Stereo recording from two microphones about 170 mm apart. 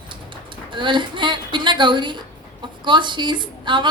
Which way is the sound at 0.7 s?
30° right (ahead or behind).